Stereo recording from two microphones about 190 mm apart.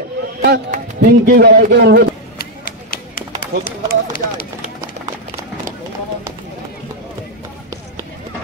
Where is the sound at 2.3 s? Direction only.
50° left (ahead or behind).